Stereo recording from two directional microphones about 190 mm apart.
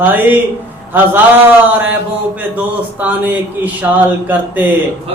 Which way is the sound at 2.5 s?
10° right (ahead or behind).